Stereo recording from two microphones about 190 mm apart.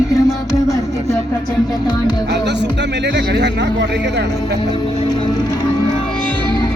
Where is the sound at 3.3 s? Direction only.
65° right (ahead or behind).